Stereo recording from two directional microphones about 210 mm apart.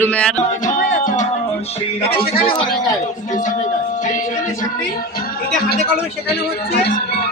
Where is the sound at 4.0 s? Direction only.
35° left (ahead or behind).